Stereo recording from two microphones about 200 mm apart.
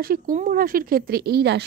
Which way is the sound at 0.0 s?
45° right (ahead or behind).